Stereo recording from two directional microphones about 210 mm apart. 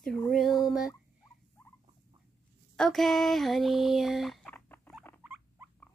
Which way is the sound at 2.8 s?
Centre (ahead or behind).